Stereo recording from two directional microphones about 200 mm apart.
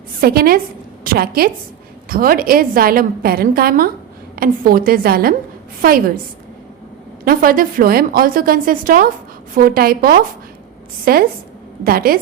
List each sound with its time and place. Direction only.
0.2 s a woman's voice: 50° right (ahead or behind)
7.3 s a woman's voice: 45° right (ahead or behind)